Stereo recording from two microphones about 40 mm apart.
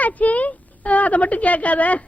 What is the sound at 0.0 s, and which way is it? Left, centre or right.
Speech, left.